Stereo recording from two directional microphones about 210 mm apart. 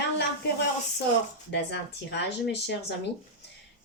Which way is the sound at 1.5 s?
55° left (ahead or behind).